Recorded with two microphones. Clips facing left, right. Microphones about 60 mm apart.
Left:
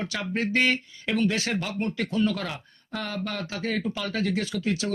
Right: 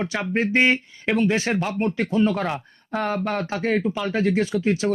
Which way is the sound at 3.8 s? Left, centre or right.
Centre.